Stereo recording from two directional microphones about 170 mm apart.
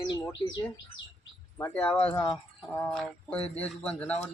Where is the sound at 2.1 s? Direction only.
20° left (ahead or behind).